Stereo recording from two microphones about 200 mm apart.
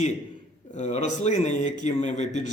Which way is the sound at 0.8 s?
35° left (ahead or behind).